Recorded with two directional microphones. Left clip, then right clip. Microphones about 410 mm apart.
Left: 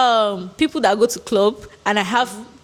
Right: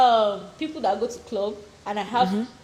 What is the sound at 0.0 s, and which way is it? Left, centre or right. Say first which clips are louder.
A woman's voice: left 2 dB; left.